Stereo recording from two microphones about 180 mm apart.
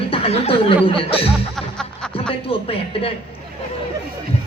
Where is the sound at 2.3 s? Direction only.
30° left (ahead or behind).